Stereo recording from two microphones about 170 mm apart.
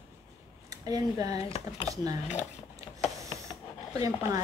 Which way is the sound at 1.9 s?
20° right (ahead or behind).